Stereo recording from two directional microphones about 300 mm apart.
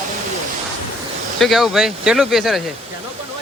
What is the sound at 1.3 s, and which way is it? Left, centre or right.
Speech, centre.